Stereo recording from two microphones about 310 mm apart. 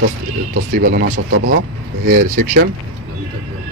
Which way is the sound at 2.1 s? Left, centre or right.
Right.